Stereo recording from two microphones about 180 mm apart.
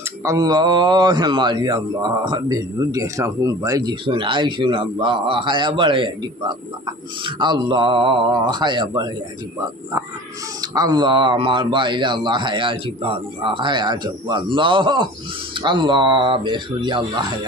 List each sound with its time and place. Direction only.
0.2 s a man's voice: 20° right (ahead or behind)
10.6 s a man's voice: 20° right (ahead or behind)